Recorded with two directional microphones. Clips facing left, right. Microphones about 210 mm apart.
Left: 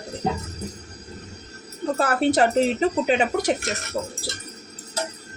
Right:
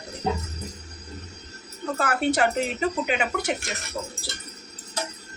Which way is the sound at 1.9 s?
35° left (ahead or behind).